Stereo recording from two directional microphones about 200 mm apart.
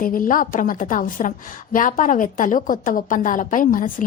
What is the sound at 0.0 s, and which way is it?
A woman's voice, 45° left (ahead or behind).